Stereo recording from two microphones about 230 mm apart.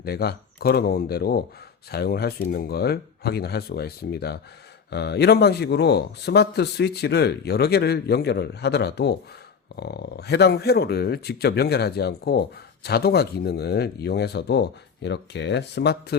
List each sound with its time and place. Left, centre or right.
0.0 s speech: left